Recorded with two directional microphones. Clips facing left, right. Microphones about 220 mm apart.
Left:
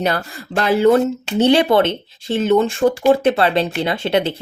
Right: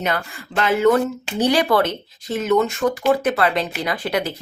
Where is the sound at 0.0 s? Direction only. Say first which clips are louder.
Left 4 dB; 35° left (ahead or behind).